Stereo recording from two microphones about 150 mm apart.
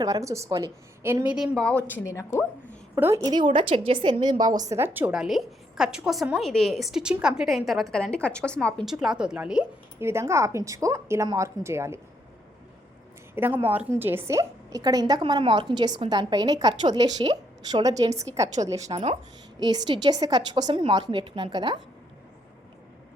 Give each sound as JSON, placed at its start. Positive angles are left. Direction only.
{"t": 0.0, "sound": "a woman's voice", "side_deg": -20}
{"t": 1.5, "sound": "a woman's voice", "side_deg": 5}
{"t": 2.9, "sound": "a woman's voice", "side_deg": -15}
{"t": 3.3, "sound": "a woman's voice", "side_deg": -35}
{"t": 10.0, "sound": "a woman's voice", "side_deg": -15}
{"t": 13.3, "sound": "a woman's voice", "side_deg": -15}
{"t": 18.9, "sound": "a woman's voice", "side_deg": -45}
{"t": 19.5, "sound": "a woman's voice", "side_deg": -30}